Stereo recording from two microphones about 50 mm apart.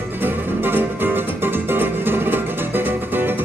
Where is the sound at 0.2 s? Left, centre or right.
Right.